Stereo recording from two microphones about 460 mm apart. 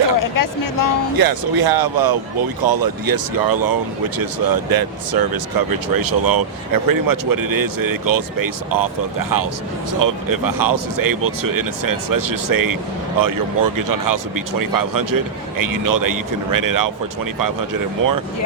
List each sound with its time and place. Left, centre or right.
0.2 s speech: left
1.1 s speech: right